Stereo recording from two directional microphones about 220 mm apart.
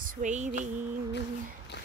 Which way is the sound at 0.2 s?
35° right (ahead or behind).